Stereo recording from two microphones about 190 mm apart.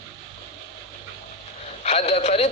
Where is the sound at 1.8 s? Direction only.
35° left (ahead or behind).